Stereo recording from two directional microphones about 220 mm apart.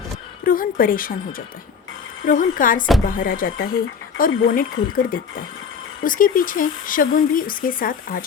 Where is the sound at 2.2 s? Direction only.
40° left (ahead or behind).